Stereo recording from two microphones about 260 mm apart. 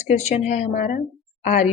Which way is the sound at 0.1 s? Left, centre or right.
Left.